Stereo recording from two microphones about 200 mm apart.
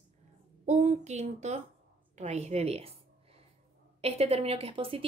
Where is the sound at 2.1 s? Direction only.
35° right (ahead or behind).